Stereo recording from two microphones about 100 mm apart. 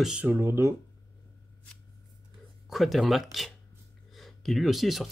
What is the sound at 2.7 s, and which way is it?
Speech, centre (ahead or behind).